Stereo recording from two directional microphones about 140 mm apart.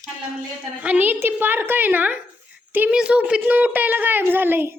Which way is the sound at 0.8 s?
10° right (ahead or behind).